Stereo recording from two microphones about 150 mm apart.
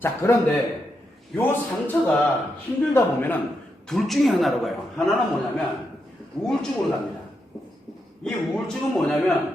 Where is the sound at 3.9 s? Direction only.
Centre (ahead or behind).